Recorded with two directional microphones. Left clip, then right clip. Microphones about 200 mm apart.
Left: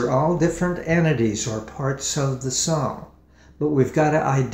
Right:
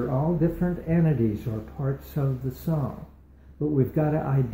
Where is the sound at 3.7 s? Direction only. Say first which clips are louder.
Left 7 dB; 5° left (ahead or behind).